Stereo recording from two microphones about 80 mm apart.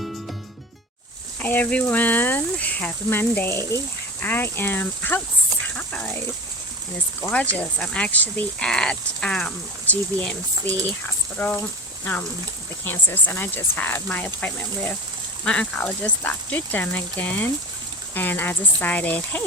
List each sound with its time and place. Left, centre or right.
1.4 s speech: left
5.7 s a sound: centre
7.8 s speech: centre
8.6 s speech: centre
12.8 s speech: left
15.4 s speech: centre